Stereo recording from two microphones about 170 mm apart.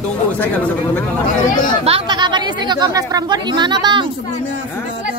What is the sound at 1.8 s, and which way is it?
Speech, 30° right (ahead or behind).